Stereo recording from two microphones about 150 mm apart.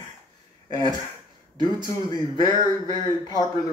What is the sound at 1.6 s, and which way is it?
Speech, 30° left (ahead or behind).